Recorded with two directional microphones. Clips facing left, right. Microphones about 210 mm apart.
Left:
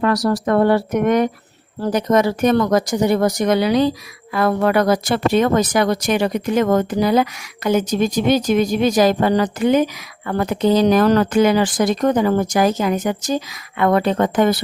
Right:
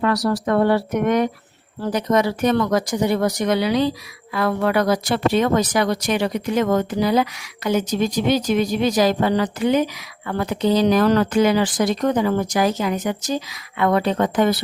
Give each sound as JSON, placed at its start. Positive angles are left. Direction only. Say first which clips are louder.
{"t": 0.0, "sound": "speech", "louder": "left 2 dB", "side_deg": 45}